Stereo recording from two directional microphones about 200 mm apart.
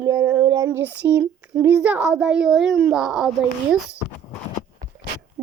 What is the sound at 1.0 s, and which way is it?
Speech, 5° right (ahead or behind).